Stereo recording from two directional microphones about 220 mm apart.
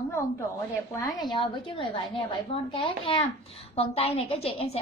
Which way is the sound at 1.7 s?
20° left (ahead or behind).